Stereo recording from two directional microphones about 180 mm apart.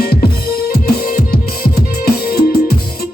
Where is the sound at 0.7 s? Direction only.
60° left (ahead or behind).